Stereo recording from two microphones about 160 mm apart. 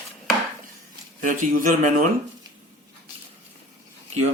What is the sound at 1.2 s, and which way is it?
Speech, 55° right (ahead or behind).